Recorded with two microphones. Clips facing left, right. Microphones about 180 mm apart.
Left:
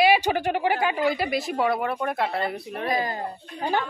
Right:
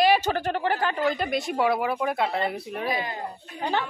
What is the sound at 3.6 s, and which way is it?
Speech, 10° left (ahead or behind).